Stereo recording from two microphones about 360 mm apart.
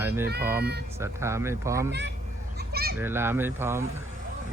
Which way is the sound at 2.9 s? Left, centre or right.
Centre.